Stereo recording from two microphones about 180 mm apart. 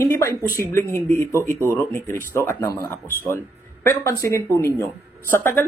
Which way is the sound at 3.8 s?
15° left (ahead or behind).